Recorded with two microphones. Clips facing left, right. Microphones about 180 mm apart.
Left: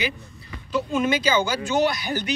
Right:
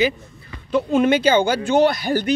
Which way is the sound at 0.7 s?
55° right (ahead or behind).